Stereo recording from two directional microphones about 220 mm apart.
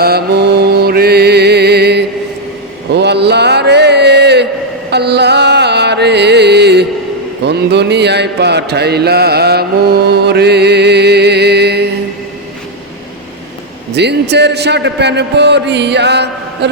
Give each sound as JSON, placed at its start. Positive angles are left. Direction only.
{"t": 0.0, "sound": "music", "side_deg": -45}
{"t": 2.9, "sound": "a sound", "side_deg": -50}
{"t": 4.9, "sound": "music", "side_deg": -50}
{"t": 7.4, "sound": "mantra", "side_deg": -50}
{"t": 13.9, "sound": "mantra", "side_deg": -50}